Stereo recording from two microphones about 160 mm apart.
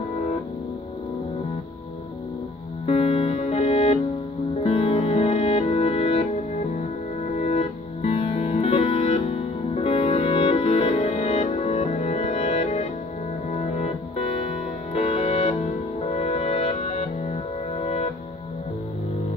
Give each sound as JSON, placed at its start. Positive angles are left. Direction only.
{"t": 2.9, "sound": "music", "side_deg": 40}